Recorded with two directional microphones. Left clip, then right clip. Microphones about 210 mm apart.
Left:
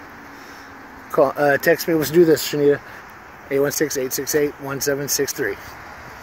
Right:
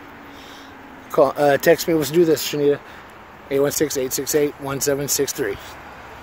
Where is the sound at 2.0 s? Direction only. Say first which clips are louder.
Left 2 dB; 15° left (ahead or behind).